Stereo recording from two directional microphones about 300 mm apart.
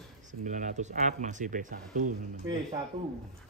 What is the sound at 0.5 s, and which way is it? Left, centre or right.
Speech, right.